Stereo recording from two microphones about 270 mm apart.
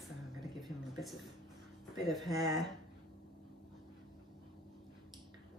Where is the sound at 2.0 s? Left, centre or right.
Centre.